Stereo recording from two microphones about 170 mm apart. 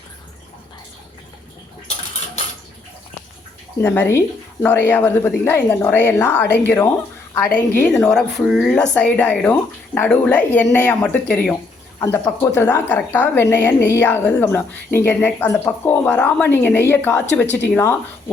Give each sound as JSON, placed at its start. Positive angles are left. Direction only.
{"t": 3.8, "sound": "a woman's voice", "side_deg": 10}
{"t": 17.4, "sound": "speech", "side_deg": 90}